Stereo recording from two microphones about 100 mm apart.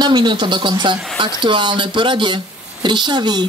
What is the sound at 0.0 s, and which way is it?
A woman's voice, 50° right (ahead or behind).